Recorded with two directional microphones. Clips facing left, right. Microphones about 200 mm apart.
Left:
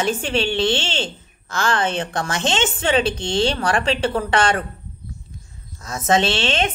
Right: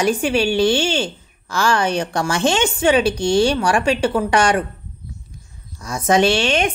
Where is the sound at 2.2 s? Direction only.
20° left (ahead or behind).